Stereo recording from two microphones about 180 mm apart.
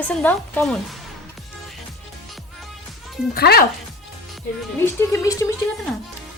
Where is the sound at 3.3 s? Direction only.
60° left (ahead or behind).